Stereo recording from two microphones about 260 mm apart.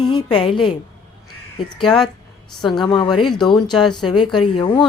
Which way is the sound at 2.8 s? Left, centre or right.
Centre.